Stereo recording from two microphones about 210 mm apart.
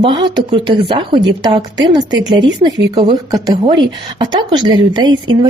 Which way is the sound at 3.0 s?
20° right (ahead or behind).